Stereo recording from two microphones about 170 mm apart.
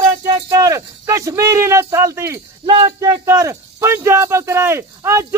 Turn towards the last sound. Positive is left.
turn(degrees=-15)  # may be behind; listen again after turning